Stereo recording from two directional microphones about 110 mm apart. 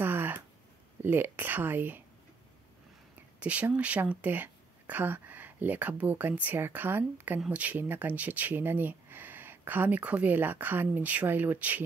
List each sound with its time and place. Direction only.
0.0 s a sound: 20° right (ahead or behind)
1.0 s speech: 20° right (ahead or behind)
3.3 s speech: 10° right (ahead or behind)